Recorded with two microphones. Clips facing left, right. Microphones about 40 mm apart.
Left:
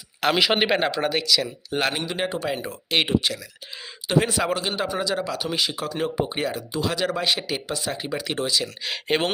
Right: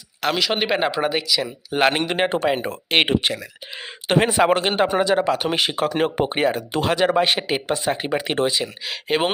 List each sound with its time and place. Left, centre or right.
0.3 s speech: centre
0.7 s speech: centre
1.8 s speech: right
6.6 s speech: right
6.9 s speech: right
8.8 s speech: centre